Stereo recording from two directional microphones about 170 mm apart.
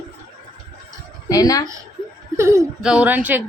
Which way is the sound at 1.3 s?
20° left (ahead or behind).